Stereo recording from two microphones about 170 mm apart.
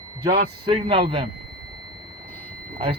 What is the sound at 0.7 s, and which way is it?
Speech, 35° right (ahead or behind).